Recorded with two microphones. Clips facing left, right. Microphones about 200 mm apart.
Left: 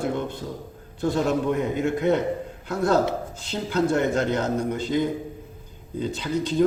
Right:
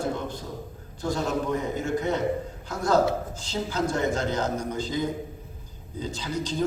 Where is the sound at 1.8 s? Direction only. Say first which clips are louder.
Left 7 dB; 60° left (ahead or behind).